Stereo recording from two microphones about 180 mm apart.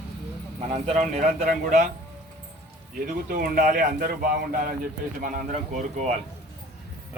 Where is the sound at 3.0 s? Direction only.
55° right (ahead or behind).